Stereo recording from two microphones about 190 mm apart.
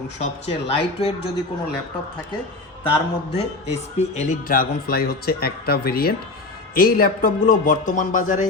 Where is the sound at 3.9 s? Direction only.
35° left (ahead or behind).